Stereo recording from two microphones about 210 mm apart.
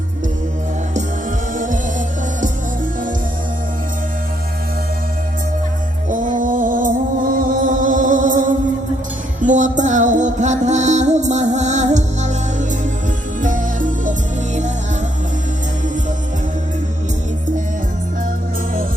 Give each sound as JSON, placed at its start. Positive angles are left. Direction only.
{"t": 1.5, "sound": "music", "side_deg": -40}
{"t": 6.1, "sound": "music", "side_deg": -40}